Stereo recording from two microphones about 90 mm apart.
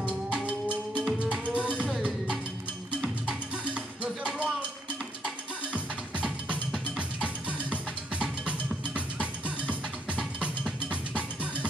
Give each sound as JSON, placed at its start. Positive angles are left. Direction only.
{"t": 0.0, "sound": "music", "side_deg": -10}
{"t": 3.0, "sound": "music", "side_deg": -10}